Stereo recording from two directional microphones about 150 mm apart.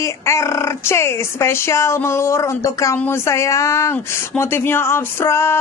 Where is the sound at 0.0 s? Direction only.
20° left (ahead or behind).